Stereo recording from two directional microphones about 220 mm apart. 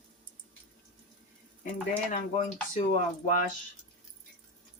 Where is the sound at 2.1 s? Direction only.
35° left (ahead or behind).